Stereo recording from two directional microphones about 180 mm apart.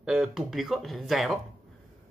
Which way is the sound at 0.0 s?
5° right (ahead or behind).